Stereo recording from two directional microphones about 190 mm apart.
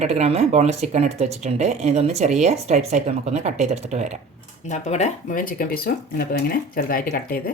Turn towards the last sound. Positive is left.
turn(degrees=50)  # may be behind; listen again after turning